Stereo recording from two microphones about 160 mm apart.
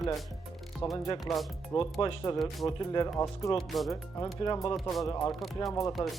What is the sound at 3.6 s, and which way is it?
Speech, centre (ahead or behind).